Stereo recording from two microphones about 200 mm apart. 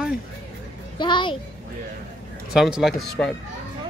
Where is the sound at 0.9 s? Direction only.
25° left (ahead or behind).